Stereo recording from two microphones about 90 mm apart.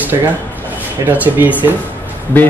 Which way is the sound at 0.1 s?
40° right (ahead or behind).